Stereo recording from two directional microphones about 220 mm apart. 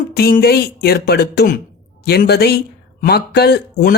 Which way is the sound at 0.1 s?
45° left (ahead or behind).